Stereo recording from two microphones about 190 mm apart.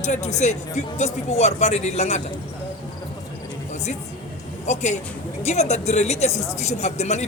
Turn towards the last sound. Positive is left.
turn(degrees=35)  # may be behind; listen again after turning